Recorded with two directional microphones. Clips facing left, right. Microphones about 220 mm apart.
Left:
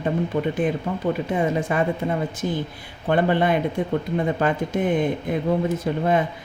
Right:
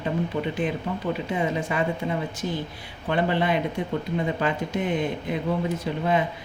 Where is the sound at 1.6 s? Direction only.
50° left (ahead or behind).